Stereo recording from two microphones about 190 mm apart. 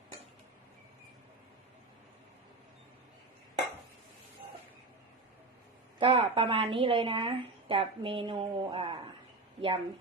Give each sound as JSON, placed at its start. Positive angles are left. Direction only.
{"t": 6.0, "sound": "a woman's voice", "side_deg": -30}